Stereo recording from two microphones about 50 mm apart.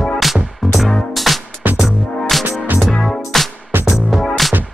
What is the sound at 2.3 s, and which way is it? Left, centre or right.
Music, centre.